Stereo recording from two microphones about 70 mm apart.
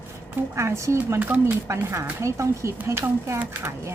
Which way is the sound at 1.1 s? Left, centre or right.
Right.